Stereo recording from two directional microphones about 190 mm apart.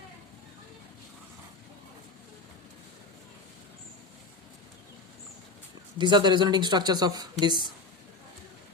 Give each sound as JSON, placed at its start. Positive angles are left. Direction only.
{"t": 6.0, "sound": "speech", "side_deg": -25}